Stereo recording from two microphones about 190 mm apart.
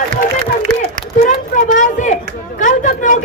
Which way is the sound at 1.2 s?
45° left (ahead or behind).